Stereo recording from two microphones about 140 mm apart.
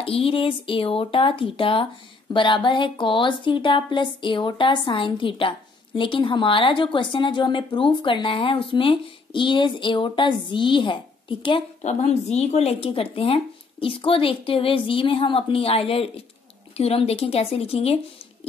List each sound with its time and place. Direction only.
0.0 s a woman's voice: 40° left (ahead or behind)
11.8 s a woman's voice: 50° left (ahead or behind)